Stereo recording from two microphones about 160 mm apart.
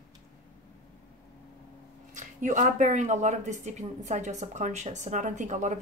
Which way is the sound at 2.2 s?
50° right (ahead or behind).